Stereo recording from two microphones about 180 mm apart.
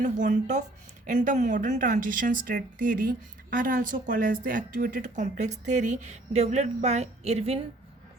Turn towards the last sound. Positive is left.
turn(degrees=-35)  # may be behind; listen again after turning